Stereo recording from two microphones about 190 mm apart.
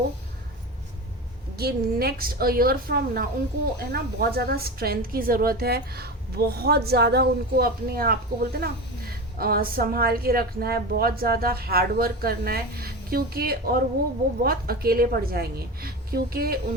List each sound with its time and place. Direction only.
1.5 s a woman's voice: 55° right (ahead or behind)